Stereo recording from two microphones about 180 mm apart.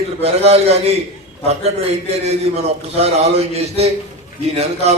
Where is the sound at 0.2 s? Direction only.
35° right (ahead or behind).